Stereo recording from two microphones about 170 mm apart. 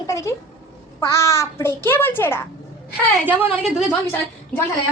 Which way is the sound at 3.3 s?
10° right (ahead or behind).